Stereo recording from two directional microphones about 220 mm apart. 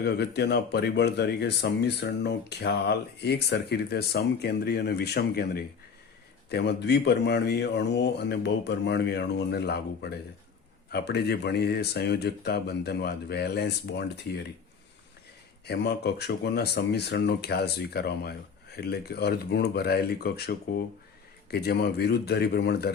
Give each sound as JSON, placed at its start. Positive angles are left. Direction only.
{"t": 0.0, "sound": "speech", "side_deg": 50}
{"t": 15.6, "sound": "speech", "side_deg": 50}